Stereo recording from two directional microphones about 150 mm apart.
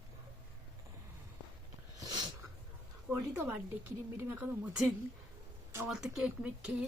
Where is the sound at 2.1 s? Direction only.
30° right (ahead or behind).